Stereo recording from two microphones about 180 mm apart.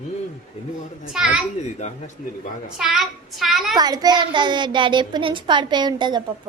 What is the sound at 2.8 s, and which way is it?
Speech, centre (ahead or behind).